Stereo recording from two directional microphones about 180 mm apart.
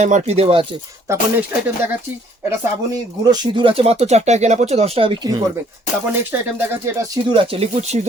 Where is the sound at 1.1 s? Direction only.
15° right (ahead or behind).